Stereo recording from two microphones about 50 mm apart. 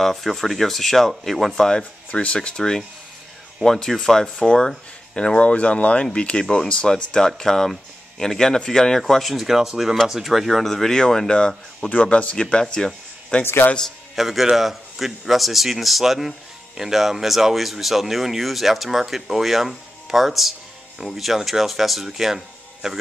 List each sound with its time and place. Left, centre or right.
0.0 s a man's voice: centre
2.0 s speech: left
6.4 s a man's voice: centre
13.4 s a man's voice: left
14.1 s a man's voice: centre